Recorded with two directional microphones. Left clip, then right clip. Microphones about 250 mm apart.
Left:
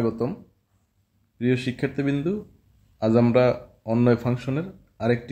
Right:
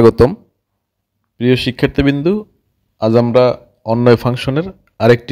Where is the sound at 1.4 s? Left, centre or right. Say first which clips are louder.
Right 11 dB; right.